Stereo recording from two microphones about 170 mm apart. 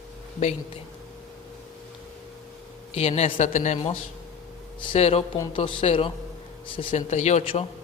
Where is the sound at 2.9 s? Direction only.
40° left (ahead or behind).